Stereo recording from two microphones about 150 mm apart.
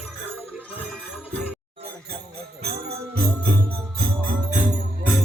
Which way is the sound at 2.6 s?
90° right.